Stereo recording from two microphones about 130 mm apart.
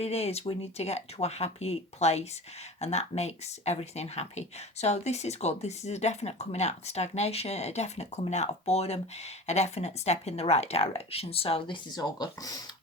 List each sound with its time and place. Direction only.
0.0 s speech: 55° left (ahead or behind); by 12.5 s 30° left (ahead or behind)